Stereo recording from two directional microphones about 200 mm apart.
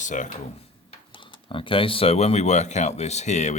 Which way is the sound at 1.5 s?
25° left (ahead or behind).